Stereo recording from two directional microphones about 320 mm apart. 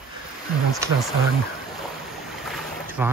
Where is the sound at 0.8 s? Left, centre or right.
Centre.